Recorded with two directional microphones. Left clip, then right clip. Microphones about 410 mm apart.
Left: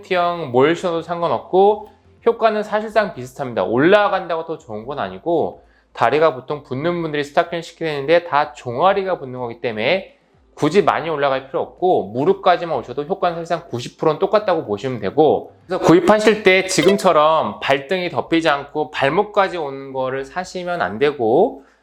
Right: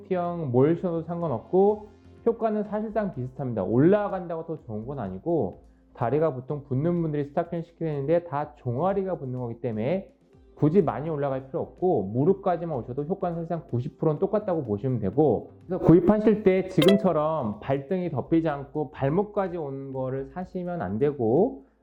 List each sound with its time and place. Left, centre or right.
0.1 s speech: centre
1.5 s speech: centre
2.2 s speech: centre
5.2 s speech: centre
6.0 s speech: centre
11.6 s speech: centre
12.1 s speech: centre
21.2 s speech: centre